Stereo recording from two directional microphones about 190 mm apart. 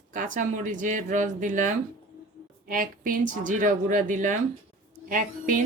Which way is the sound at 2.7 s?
45° right (ahead or behind).